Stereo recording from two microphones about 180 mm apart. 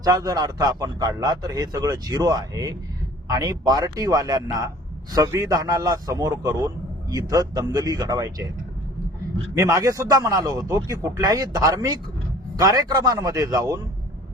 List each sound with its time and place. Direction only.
0.0 s a man's voice: 20° right (ahead or behind)
9.6 s a man's voice: 15° right (ahead or behind)